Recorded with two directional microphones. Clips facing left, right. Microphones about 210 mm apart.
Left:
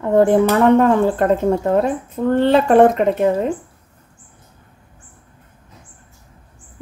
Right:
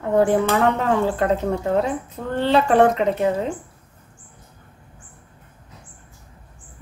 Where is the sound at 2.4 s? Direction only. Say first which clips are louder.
Left 4 dB; 50° left (ahead or behind).